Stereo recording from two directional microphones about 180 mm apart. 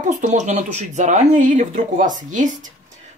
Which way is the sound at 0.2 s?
40° right (ahead or behind).